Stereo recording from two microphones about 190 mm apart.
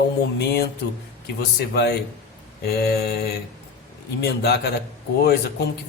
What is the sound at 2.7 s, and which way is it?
Speech, 55° left (ahead or behind).